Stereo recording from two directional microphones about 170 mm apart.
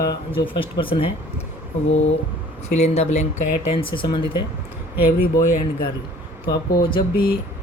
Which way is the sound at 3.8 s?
30° left (ahead or behind).